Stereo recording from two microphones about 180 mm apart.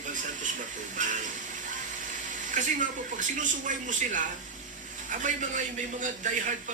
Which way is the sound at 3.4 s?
45° right (ahead or behind).